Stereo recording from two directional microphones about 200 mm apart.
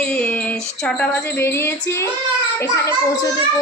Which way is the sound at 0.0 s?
5° left (ahead or behind).